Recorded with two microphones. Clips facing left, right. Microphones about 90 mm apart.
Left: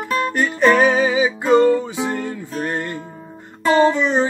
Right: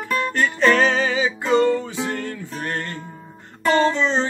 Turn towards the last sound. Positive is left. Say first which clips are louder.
# left 3 dB
turn(degrees=15)  # may be behind; listen again after turning